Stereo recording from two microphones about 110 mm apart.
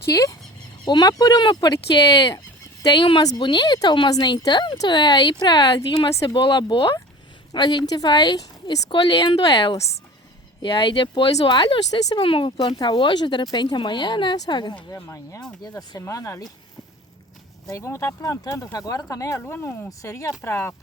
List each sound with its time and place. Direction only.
0.0 s speech: 30° left (ahead or behind)
2.8 s speech: 45° left (ahead or behind)
11.9 s speech: 35° left (ahead or behind)
12.2 s speech: 55° left (ahead or behind)
12.5 s speech: 45° left (ahead or behind)
14.9 s speech: 30° left (ahead or behind)
17.7 s speech: 25° left (ahead or behind)
19.4 s speech: 20° left (ahead or behind)
19.9 s speech: 30° left (ahead or behind)